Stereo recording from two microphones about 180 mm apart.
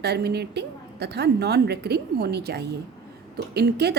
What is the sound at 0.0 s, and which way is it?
A woman's voice, 65° right (ahead or behind).